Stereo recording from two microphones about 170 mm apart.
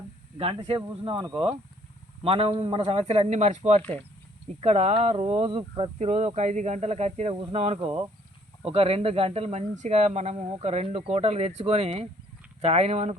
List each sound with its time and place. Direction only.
0.3 s speech: 35° right (ahead or behind)